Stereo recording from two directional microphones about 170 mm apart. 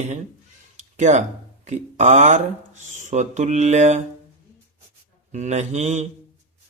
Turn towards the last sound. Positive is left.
turn(degrees=-40)  # may be behind; listen again after turning